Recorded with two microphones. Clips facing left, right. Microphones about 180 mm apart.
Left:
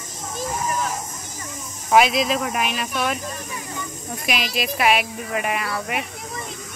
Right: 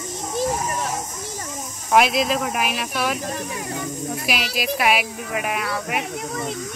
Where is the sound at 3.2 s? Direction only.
60° right (ahead or behind).